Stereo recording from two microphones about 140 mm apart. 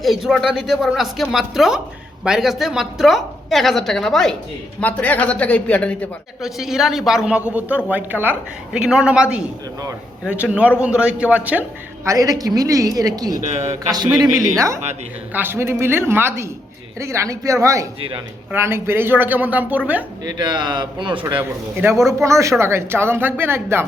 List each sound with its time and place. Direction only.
0.0 s a woman's voice: centre (ahead or behind)
6.4 s a woman's voice: 5° right (ahead or behind)
12.0 s a woman's voice: 25° right (ahead or behind)
20.2 s speech: 30° right (ahead or behind)
21.3 s a woman's voice: 15° right (ahead or behind)